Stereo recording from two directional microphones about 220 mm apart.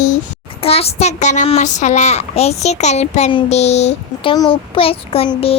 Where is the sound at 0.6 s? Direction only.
25° left (ahead or behind).